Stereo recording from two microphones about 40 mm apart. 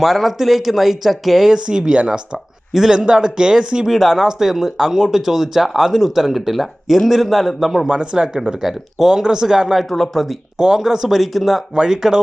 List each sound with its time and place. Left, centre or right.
0.0 s speech: centre
1.5 s speech: centre
2.7 s speech: centre
3.8 s speech: centre
7.9 s speech: right
8.6 s speech: centre
9.7 s speech: centre
10.6 s speech: centre
11.2 s speech: centre
11.7 s speech: centre